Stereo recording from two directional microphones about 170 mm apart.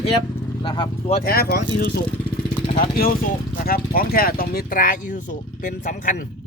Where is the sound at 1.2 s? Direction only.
60° left (ahead or behind).